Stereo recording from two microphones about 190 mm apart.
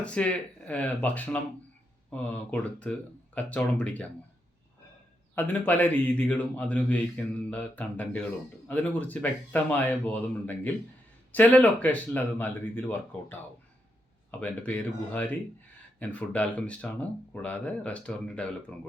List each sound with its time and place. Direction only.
0.0 s speech: 5° left (ahead or behind)
5.3 s speech: 10° left (ahead or behind)